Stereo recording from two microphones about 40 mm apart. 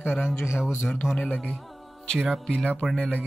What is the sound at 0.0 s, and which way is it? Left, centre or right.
Speech, left.